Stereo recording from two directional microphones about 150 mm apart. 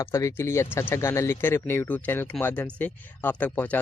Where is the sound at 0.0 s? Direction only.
20° left (ahead or behind).